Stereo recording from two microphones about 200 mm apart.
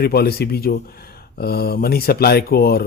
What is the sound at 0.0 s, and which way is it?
Speech, 50° left (ahead or behind).